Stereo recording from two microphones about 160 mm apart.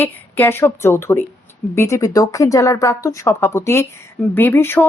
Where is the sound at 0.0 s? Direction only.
15° left (ahead or behind).